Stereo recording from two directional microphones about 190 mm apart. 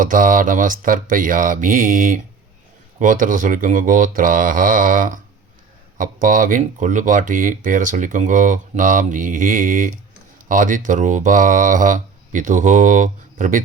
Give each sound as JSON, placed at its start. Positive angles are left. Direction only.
{"t": 0.0, "sound": "speech", "side_deg": -45}